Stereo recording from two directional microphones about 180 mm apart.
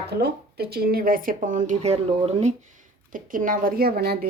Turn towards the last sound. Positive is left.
turn(degrees=-60)  # may be behind; listen again after turning